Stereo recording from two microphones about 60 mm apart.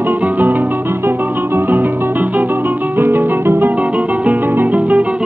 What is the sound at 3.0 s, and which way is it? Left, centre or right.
Music, right.